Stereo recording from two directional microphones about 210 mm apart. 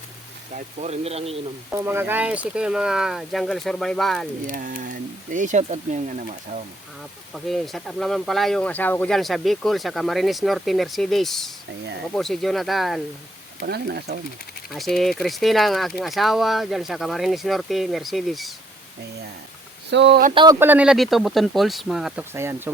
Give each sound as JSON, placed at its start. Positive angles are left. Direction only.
{"t": 0.5, "sound": "speech", "side_deg": -30}
{"t": 1.7, "sound": "speech", "side_deg": -10}
{"t": 4.5, "sound": "speech", "side_deg": -40}
{"t": 7.3, "sound": "speech", "side_deg": 0}
{"t": 13.6, "sound": "speech", "side_deg": -50}
{"t": 14.7, "sound": "speech", "side_deg": 0}
{"t": 19.9, "sound": "speech", "side_deg": -55}
{"t": 20.3, "sound": "speech", "side_deg": -20}
{"t": 20.6, "sound": "speech", "side_deg": -10}